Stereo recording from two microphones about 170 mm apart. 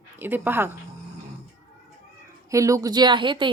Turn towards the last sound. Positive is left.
turn(degrees=-30)  # may be behind; listen again after turning